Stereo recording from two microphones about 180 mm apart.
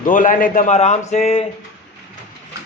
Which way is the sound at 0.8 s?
40° left (ahead or behind).